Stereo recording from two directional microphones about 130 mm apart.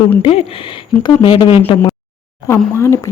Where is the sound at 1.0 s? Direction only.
40° left (ahead or behind).